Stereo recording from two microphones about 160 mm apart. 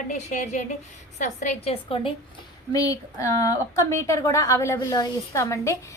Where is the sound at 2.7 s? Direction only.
20° left (ahead or behind).